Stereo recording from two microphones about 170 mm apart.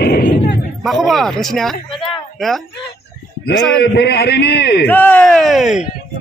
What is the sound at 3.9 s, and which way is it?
Speech, 70° left (ahead or behind).